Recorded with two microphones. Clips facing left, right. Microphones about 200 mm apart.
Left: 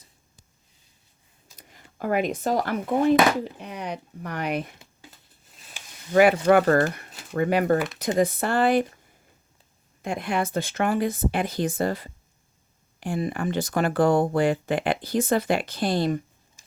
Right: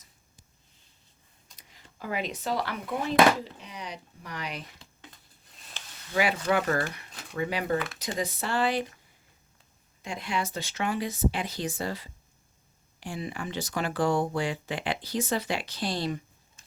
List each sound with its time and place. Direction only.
1.5 s speech: 50° left (ahead or behind)
4.8 s a sound: 5° left (ahead or behind)
6.1 s speech: 55° left (ahead or behind)
7.1 s a sound: 5° left (ahead or behind)
7.3 s speech: 55° left (ahead or behind)
10.0 s speech: 55° left (ahead or behind)